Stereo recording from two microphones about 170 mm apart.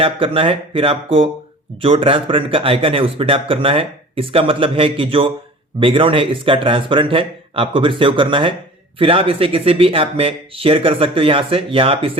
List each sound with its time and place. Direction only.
0.0 s speech: 30° right (ahead or behind)